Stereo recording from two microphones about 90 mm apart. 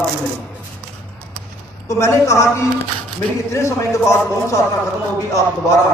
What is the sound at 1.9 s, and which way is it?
A man's voice, 35° left (ahead or behind).